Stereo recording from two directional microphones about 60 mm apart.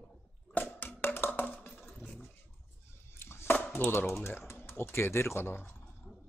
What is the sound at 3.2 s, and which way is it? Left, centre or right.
Chopping, left.